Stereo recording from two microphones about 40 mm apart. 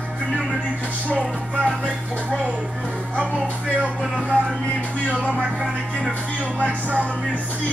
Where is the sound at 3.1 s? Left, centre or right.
Right.